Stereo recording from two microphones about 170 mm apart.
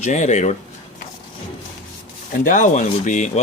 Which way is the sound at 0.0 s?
45° left (ahead or behind).